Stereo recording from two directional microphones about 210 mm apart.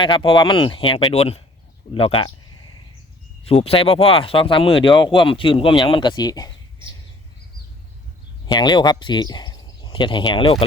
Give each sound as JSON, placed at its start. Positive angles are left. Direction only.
{"t": 0.0, "sound": "speech", "side_deg": 25}
{"t": 3.4, "sound": "speech", "side_deg": 30}
{"t": 8.4, "sound": "speech", "side_deg": 20}